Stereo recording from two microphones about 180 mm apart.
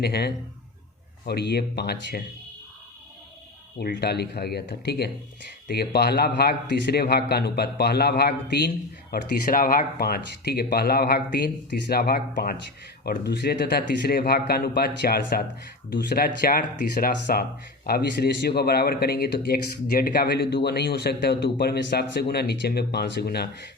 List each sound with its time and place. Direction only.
0.0 s speech: 65° left (ahead or behind)
3.8 s speech: 65° left (ahead or behind)